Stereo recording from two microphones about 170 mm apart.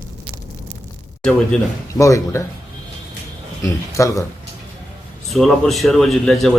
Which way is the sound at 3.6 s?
20° left (ahead or behind).